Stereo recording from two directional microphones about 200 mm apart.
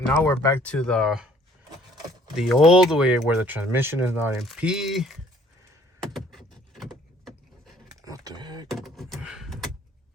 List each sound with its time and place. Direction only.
0.0 s speech: 10° left (ahead or behind)
2.3 s speech: centre (ahead or behind)
6.0 s vehicle: centre (ahead or behind)
8.0 s a sound: 20° right (ahead or behind)
8.6 s beatboxing: centre (ahead or behind)